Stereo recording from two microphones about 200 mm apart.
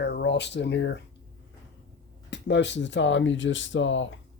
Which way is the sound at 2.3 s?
60° left (ahead or behind).